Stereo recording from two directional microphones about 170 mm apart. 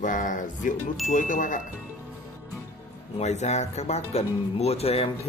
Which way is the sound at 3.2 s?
40° left (ahead or behind).